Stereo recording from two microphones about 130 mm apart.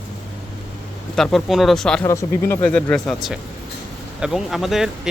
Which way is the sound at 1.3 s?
Centre (ahead or behind).